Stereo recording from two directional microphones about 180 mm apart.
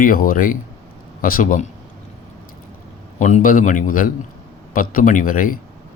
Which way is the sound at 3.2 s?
45° left (ahead or behind).